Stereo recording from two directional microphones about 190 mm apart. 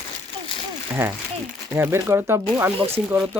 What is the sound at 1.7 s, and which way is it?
Speech, 15° right (ahead or behind).